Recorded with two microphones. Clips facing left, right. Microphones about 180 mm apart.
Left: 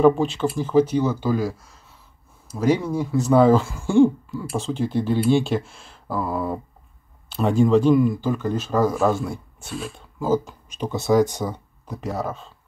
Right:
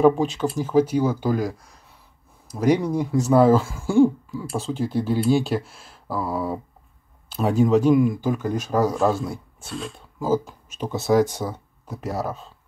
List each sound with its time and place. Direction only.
0.0 s speech: 5° right (ahead or behind)
8.9 s speech: 5° left (ahead or behind)